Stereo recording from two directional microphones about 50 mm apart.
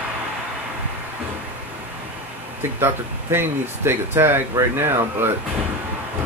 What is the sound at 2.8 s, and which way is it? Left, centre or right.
Speech, right.